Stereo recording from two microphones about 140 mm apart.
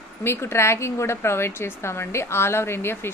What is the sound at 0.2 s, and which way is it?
A woman's voice, 15° left (ahead or behind).